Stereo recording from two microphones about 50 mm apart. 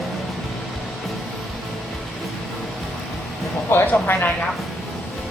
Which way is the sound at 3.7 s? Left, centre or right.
Left.